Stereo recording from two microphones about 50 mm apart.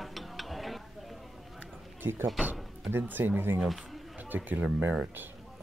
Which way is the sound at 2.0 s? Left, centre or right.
Right.